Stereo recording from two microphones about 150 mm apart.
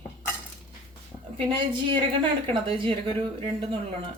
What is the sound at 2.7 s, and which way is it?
A woman's voice, 40° right (ahead or behind).